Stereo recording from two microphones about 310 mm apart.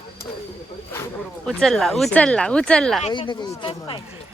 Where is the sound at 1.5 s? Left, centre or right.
Centre.